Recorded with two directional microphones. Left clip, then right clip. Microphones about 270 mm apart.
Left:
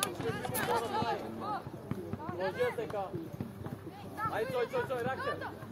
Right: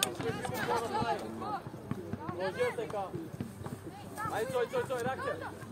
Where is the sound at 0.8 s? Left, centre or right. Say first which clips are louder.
Right 1 dB; centre.